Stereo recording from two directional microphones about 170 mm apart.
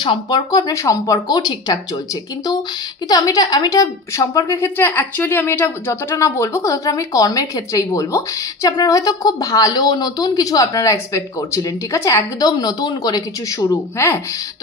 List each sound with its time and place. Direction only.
0.0 s a woman's voice: 25° left (ahead or behind)
3.1 s a woman's voice: 20° left (ahead or behind)